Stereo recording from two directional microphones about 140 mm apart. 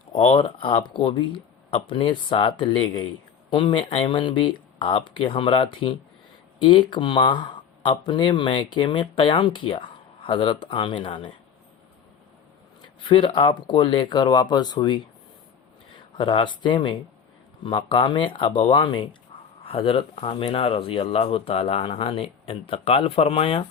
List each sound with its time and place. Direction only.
0.1 s speech: 40° left (ahead or behind)
12.8 s speech: 35° left (ahead or behind)
16.1 s speech: 40° left (ahead or behind)